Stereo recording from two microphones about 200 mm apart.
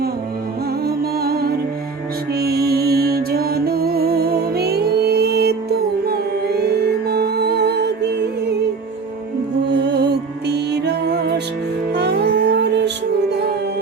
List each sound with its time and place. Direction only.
0.9 s music: 50° right (ahead or behind)
9.8 s music: 55° right (ahead or behind)